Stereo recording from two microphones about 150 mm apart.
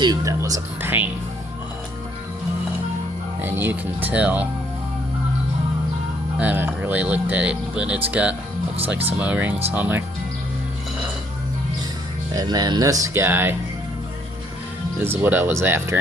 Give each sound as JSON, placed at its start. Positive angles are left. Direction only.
{"t": 0.0, "sound": "speech", "side_deg": -25}
{"t": 3.4, "sound": "speech", "side_deg": -15}
{"t": 6.4, "sound": "speech", "side_deg": -10}
{"t": 12.3, "sound": "speech", "side_deg": -25}
{"t": 15.0, "sound": "speech", "side_deg": -15}